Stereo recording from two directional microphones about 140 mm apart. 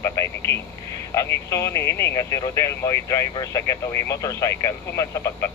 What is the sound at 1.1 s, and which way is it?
Speech, 20° left (ahead or behind).